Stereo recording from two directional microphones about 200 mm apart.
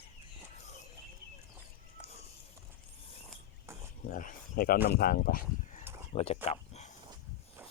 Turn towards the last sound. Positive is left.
turn(degrees=35)  # may be behind; listen again after turning